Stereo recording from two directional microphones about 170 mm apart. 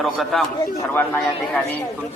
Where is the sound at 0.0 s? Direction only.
Centre (ahead or behind).